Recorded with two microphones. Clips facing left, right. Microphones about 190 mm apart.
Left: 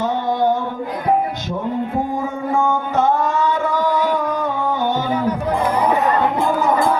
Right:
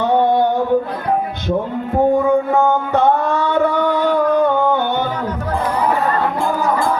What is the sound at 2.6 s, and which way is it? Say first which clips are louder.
Music: right 3 dB; 60° right (ahead or behind).